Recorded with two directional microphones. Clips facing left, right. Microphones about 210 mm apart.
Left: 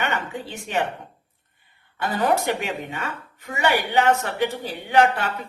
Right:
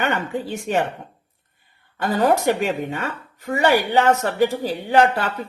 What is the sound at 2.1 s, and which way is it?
Speech, 40° right (ahead or behind).